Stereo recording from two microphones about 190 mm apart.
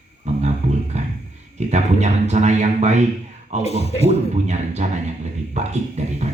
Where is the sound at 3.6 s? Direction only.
35° left (ahead or behind).